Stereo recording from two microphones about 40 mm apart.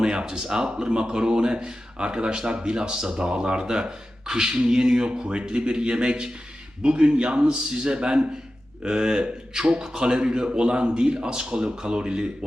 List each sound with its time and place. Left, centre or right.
0.0 s speech: centre